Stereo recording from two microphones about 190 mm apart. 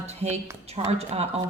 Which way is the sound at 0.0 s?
35° right (ahead or behind).